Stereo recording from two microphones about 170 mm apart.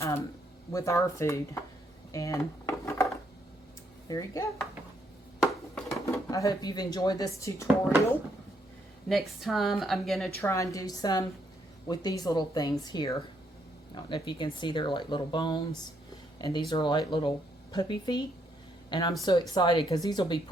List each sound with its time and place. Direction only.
0.7 s speech: 20° left (ahead or behind)
2.1 s a sound: 20° left (ahead or behind)
4.1 s speech: 20° left (ahead or behind)
5.4 s a sound: centre (ahead or behind)
6.1 s speech: 20° left (ahead or behind)
9.0 s speech: centre (ahead or behind)
10.4 s speech: 20° left (ahead or behind)